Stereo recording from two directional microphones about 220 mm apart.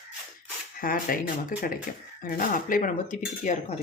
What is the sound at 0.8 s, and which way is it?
Speech, 40° left (ahead or behind).